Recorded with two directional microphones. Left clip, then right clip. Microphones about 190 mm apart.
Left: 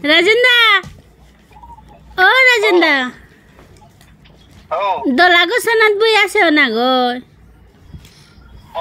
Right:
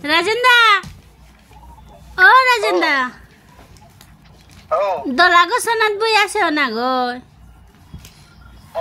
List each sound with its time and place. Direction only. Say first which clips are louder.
0.0 s a woman's voice: left 4 dB; 20° left (ahead or behind)
2.1 s a woman's voice: even; 20° left (ahead or behind)
4.6 s speech: left 1 dB; centre (ahead or behind)
5.0 s a woman's voice: left 2 dB; 20° left (ahead or behind)